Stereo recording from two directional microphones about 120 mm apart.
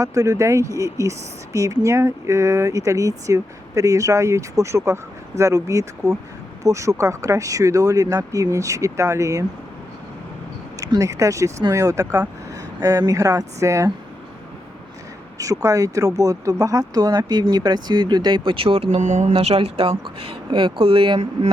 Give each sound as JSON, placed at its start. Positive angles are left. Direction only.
{"t": 0.0, "sound": "speech", "side_deg": -25}
{"t": 10.8, "sound": "speech", "side_deg": -30}
{"t": 15.4, "sound": "speech", "side_deg": -30}
{"t": 18.9, "sound": "speech", "side_deg": -75}
{"t": 19.3, "sound": "speech", "side_deg": -55}